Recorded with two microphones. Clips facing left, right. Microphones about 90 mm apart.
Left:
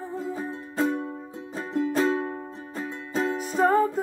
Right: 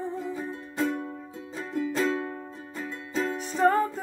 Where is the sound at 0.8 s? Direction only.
30° left (ahead or behind).